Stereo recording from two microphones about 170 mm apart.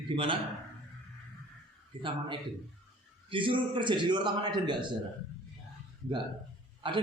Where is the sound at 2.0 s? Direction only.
30° right (ahead or behind).